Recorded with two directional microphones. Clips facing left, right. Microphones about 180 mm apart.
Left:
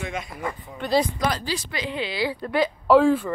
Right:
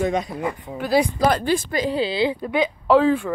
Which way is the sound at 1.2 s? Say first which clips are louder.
Right 7 dB; 55° right (ahead or behind).